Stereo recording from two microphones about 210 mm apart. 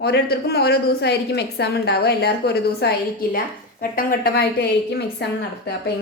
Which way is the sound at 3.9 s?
45° left (ahead or behind).